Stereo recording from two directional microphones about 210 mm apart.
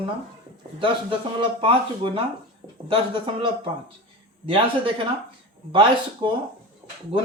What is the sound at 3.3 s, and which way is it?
Speech, 25° right (ahead or behind).